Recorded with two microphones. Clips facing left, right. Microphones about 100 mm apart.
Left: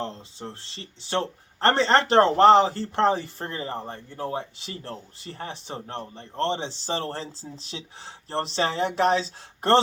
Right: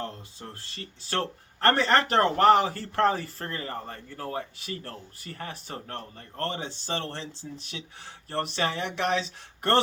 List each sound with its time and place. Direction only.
0.0 s speech: 25° left (ahead or behind)